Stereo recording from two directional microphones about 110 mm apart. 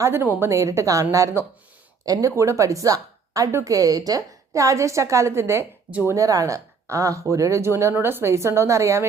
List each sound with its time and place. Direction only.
0.0 s a woman's voice: 25° right (ahead or behind)